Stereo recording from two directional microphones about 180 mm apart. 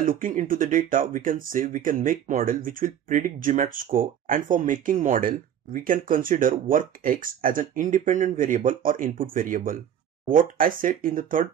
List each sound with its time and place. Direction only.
0.0 s speech: 50° right (ahead or behind)